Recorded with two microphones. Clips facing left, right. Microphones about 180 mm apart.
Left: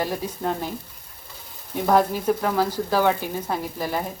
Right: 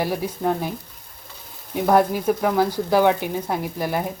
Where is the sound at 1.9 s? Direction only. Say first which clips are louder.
Right 2 dB; 10° right (ahead or behind).